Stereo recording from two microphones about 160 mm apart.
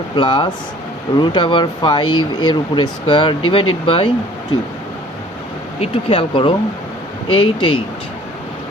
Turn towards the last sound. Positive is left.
turn(degrees=35)  # may be behind; listen again after turning